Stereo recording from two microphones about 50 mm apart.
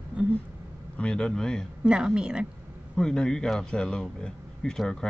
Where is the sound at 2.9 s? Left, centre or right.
Centre.